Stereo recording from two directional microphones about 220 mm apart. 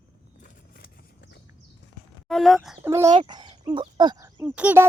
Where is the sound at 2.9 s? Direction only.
15° right (ahead or behind).